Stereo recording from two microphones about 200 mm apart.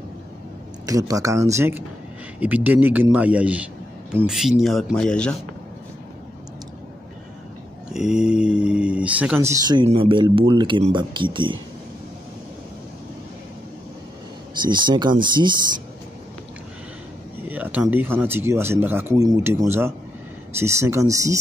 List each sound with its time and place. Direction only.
0.8 s speech: 15° right (ahead or behind); by 5.3 s 5° left (ahead or behind)
7.9 s speech: 5° right (ahead or behind); by 11.5 s 25° right (ahead or behind)
14.6 s speech: 25° right (ahead or behind)
17.5 s speech: 10° right (ahead or behind)